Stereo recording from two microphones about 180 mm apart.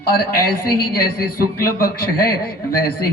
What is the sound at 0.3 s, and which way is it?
A woman's voice, 55° left (ahead or behind).